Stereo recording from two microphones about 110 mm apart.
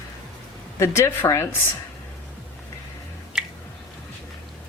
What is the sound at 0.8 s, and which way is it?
Speech, 25° left (ahead or behind).